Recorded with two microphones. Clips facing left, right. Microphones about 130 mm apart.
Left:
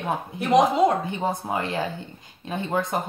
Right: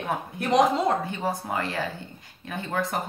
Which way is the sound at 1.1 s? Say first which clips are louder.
Left 2 dB; 20° left (ahead or behind).